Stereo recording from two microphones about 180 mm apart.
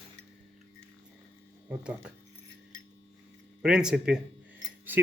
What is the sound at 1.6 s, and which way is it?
Speech, 5° right (ahead or behind).